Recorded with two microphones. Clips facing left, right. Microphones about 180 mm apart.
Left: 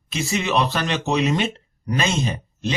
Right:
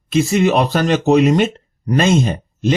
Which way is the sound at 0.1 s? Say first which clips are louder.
Right 9 dB; 50° right (ahead or behind).